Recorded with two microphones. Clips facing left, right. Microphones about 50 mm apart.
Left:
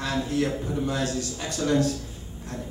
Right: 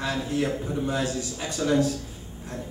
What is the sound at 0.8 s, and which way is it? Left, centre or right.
A man's voice, centre.